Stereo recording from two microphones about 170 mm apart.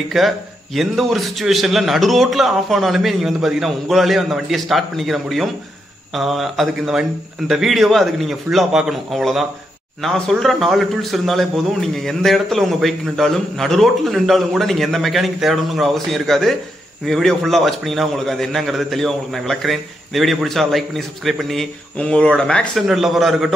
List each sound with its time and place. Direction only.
0.2 s a man's voice: centre (ahead or behind)